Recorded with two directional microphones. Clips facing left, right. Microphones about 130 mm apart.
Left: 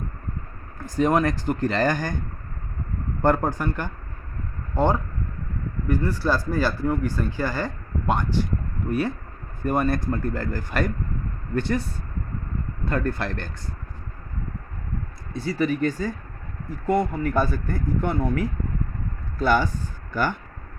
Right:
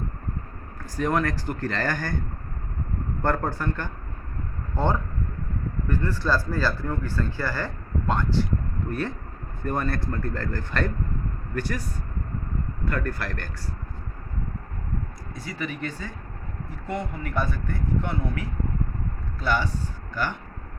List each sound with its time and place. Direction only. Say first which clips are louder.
0.9 s speech: left 4 dB; 20° left (ahead or behind)
3.2 s speech: left 5 dB; 15° left (ahead or behind)
11.5 s speech: left 6 dB; 25° left (ahead or behind)
15.3 s speech: left 10 dB; 30° left (ahead or behind); by 19.7 s 45° left (ahead or behind)